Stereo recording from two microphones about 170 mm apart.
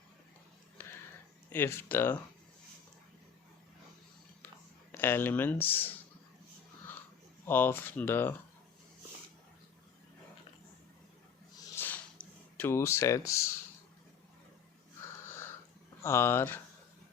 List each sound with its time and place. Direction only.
0.8 s a sound: 15° left (ahead or behind)
1.5 s speech: 10° left (ahead or behind)
4.9 s speech: 10° left (ahead or behind)
7.4 s speech: 10° left (ahead or behind)
11.5 s a sound: 20° left (ahead or behind)
12.5 s speech: 15° left (ahead or behind)
16.0 s speech: 15° left (ahead or behind)